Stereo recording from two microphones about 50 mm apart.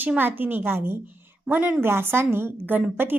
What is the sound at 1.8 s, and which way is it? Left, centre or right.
A woman's voice, right.